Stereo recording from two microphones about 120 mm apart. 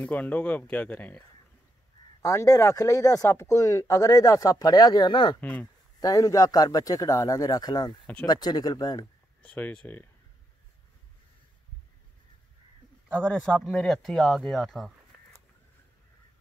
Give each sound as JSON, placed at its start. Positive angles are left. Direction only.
{"t": 0.0, "sound": "speech", "side_deg": 15}
{"t": 2.2, "sound": "speech", "side_deg": 25}
{"t": 5.4, "sound": "speech", "side_deg": 15}
{"t": 5.9, "sound": "speech", "side_deg": 30}
{"t": 9.4, "sound": "speech", "side_deg": 10}
{"t": 13.1, "sound": "speech", "side_deg": 10}